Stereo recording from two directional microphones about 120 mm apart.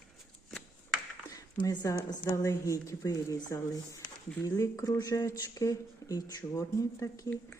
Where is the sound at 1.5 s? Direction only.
35° left (ahead or behind).